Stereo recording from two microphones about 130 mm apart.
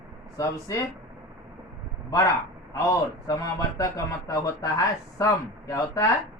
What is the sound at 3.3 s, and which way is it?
Speech, 25° left (ahead or behind).